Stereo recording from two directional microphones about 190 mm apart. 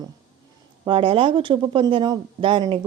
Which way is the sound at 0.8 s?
25° right (ahead or behind).